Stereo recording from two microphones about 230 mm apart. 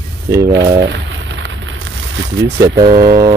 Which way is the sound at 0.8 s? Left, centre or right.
Right.